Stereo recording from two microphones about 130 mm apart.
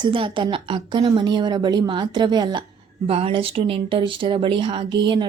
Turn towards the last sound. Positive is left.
turn(degrees=-40)  # may be behind; listen again after turning